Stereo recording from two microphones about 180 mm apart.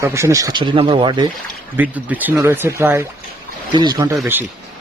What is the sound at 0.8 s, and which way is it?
Speech, 30° right (ahead or behind).